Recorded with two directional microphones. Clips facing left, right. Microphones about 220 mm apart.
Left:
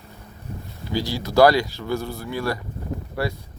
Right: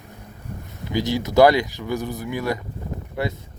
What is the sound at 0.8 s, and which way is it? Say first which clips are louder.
Speech: right 3 dB; 20° right (ahead or behind).